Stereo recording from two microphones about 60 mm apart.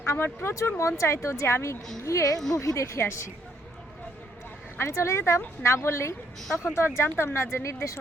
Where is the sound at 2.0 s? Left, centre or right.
Left.